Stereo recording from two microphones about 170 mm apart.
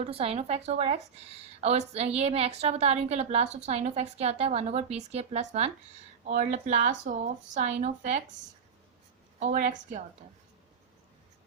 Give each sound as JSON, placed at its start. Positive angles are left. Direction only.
{"t": 0.0, "sound": "a woman's voice", "side_deg": -35}
{"t": 9.4, "sound": "speech", "side_deg": -45}